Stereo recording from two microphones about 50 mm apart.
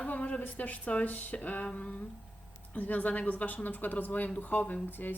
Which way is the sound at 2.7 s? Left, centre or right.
Left.